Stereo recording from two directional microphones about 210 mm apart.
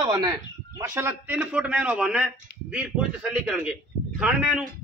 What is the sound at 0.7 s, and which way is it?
A man's voice, 10° right (ahead or behind).